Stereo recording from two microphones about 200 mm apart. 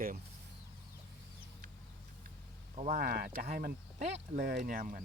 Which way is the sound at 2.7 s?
40° right (ahead or behind).